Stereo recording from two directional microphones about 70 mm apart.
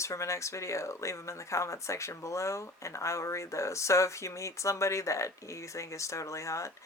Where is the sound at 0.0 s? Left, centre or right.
Left.